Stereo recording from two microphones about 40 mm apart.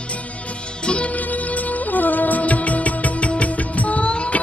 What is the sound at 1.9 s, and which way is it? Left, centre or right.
Music, left.